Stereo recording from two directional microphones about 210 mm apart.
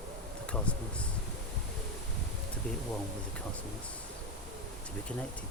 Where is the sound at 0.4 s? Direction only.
5° left (ahead or behind).